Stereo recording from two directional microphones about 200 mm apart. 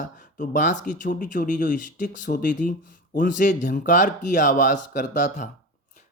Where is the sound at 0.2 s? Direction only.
40° left (ahead or behind).